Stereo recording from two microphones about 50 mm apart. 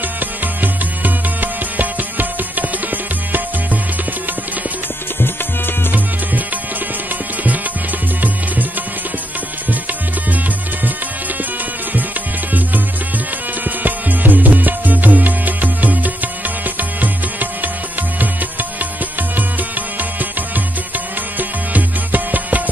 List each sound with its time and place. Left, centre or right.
0.2 s music: right
13.7 s music: right
20.0 s music: right